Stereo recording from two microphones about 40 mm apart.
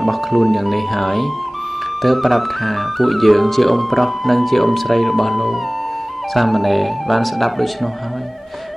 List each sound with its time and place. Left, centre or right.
0.0 s speech: centre